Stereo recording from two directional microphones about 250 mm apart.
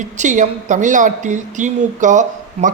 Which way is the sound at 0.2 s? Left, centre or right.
Right.